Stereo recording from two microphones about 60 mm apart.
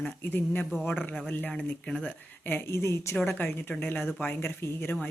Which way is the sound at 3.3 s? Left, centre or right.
Left.